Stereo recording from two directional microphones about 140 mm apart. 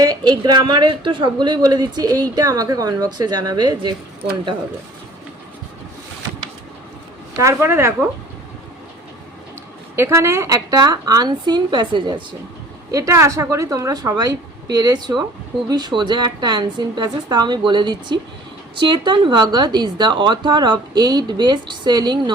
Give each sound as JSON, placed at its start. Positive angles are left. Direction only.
{"t": 0.0, "sound": "a woman's voice", "side_deg": -30}
{"t": 7.3, "sound": "a woman's voice", "side_deg": -20}
{"t": 9.9, "sound": "a woman's voice", "side_deg": -20}
{"t": 12.9, "sound": "a woman's voice", "side_deg": -25}